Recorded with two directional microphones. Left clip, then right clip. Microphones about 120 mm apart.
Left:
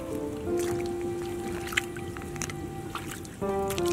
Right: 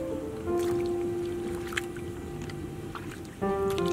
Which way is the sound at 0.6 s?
Centre (ahead or behind).